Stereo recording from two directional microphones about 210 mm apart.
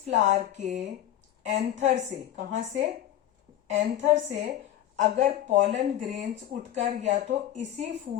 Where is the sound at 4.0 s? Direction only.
35° right (ahead or behind).